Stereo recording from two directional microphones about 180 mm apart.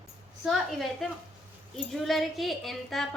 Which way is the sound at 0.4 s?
Centre (ahead or behind).